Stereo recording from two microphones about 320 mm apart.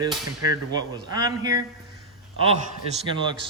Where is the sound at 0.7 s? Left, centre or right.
Centre.